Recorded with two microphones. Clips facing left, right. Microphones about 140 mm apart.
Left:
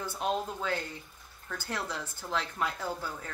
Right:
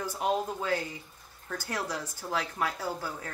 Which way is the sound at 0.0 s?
10° right (ahead or behind).